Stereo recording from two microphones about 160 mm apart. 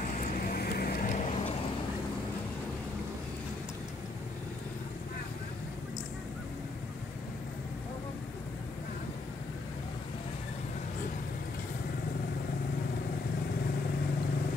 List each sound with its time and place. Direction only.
0.0 s vehicle: 55° left (ahead or behind)
1.1 s vehicle: 45° left (ahead or behind)